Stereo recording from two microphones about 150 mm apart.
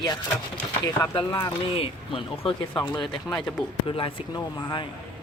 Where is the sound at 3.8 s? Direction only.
35° left (ahead or behind).